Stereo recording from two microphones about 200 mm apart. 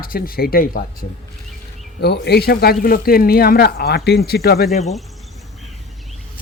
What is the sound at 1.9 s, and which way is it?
Speech, 55° left (ahead or behind).